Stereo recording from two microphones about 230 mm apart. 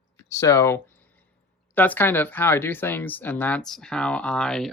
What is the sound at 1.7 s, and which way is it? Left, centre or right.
Speech, centre.